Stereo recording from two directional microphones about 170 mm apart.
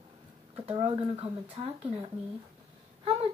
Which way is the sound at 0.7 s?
35° right (ahead or behind).